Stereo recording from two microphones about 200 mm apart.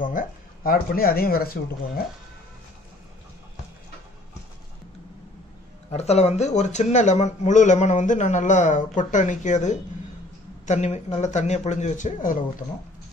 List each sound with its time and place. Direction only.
0.0 s speech: 45° left (ahead or behind)
5.9 s speech: 35° left (ahead or behind)